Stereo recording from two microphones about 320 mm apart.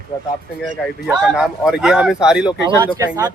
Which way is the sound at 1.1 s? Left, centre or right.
Centre.